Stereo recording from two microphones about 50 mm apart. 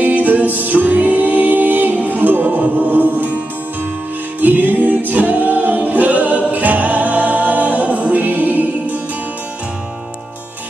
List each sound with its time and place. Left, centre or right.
0.0 s music: right
4.4 s music: right
5.9 s a capella: right